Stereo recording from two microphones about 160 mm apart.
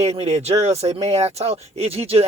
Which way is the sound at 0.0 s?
40° right (ahead or behind).